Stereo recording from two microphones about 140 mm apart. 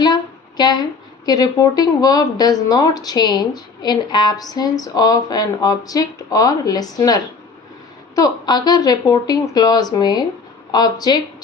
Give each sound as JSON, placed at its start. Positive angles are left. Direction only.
{"t": 0.0, "sound": "speech", "side_deg": 30}